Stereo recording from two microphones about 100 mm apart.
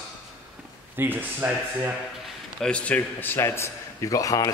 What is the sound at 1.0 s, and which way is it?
Speech, 20° right (ahead or behind).